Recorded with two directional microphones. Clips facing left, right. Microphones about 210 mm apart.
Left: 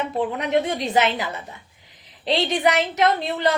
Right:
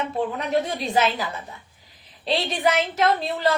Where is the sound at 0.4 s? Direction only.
20° left (ahead or behind).